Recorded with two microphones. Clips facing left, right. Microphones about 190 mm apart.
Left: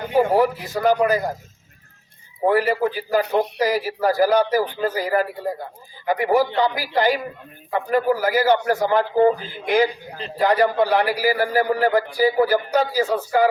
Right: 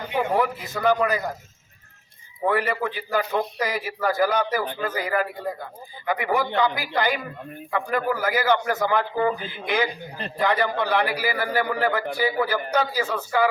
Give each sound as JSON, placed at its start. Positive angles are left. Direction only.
{"t": 0.1, "sound": "a man's voice", "side_deg": 40}
{"t": 2.4, "sound": "a man's voice", "side_deg": 35}